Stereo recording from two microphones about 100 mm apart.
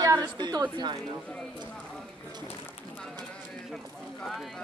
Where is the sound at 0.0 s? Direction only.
40° right (ahead or behind).